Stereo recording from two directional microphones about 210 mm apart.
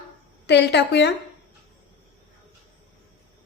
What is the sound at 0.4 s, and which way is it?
Speech, 55° left (ahead or behind).